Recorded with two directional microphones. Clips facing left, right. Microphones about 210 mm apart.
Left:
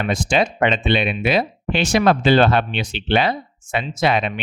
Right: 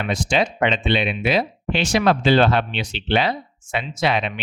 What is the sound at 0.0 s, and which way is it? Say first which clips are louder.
Speech: left 2 dB; 50° left (ahead or behind).